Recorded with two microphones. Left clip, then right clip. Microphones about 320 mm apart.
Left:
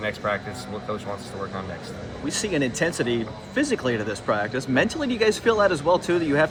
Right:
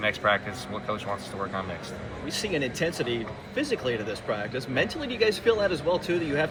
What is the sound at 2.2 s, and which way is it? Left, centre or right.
Speech, left.